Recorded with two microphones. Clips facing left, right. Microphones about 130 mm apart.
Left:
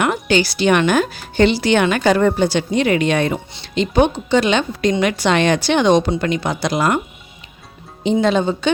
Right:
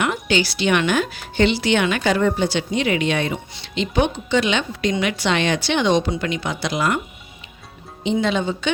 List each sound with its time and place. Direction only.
0.0 s speech: 45° left (ahead or behind)
8.0 s speech: 40° left (ahead or behind)